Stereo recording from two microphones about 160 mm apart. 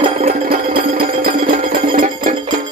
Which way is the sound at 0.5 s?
70° right (ahead or behind).